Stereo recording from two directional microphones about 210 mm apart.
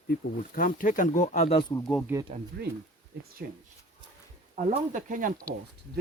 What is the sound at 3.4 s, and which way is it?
Speech, 40° right (ahead or behind).